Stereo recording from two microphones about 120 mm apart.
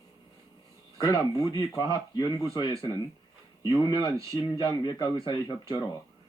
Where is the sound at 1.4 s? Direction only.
35° left (ahead or behind).